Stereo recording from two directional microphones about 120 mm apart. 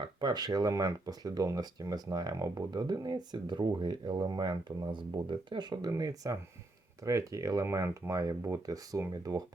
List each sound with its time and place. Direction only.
0.0 s speech: 35° right (ahead or behind)